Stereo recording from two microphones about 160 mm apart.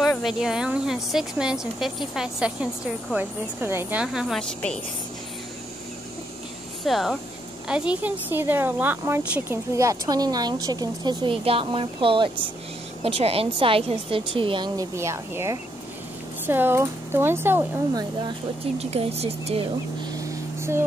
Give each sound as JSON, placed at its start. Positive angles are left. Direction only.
{"t": 0.2, "sound": "speech", "side_deg": -5}
{"t": 6.8, "sound": "a woman's voice", "side_deg": 0}
{"t": 15.0, "sound": "speech", "side_deg": -15}
{"t": 18.8, "sound": "a woman's voice", "side_deg": -40}
{"t": 20.2, "sound": "a sound", "side_deg": -20}